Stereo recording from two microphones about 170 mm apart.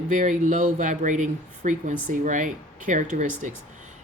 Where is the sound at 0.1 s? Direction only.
50° right (ahead or behind).